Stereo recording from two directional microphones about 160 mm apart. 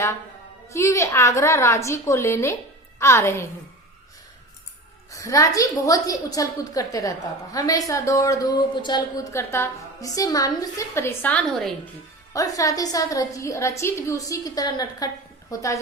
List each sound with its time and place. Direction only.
0.7 s a woman's voice: 20° left (ahead or behind)
5.1 s speech: 20° left (ahead or behind)
12.3 s speech: 20° left (ahead or behind)